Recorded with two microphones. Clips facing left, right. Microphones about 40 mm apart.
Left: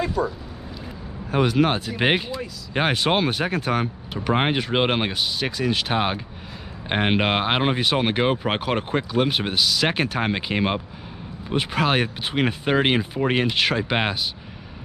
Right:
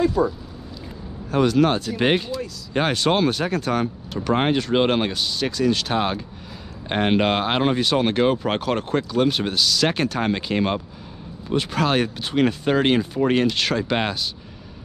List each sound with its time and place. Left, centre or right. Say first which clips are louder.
0.2 s speech: right 3 dB; centre
1.3 s speech: right 2 dB; centre